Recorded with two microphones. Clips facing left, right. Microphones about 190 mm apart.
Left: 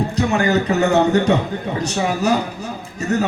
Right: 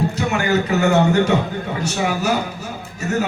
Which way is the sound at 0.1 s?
35° left (ahead or behind).